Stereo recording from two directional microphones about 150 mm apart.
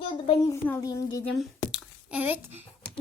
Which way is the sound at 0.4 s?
25° left (ahead or behind).